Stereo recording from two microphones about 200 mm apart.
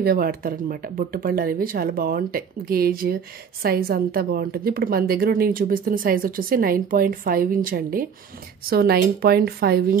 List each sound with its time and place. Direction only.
0.0 s speech: 50° right (ahead or behind)